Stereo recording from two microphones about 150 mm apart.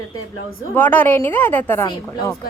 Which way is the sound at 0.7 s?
15° left (ahead or behind).